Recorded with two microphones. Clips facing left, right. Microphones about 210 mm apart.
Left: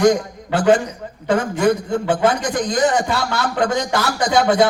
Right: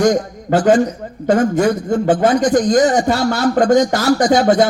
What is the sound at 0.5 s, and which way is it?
A man's voice, 45° right (ahead or behind).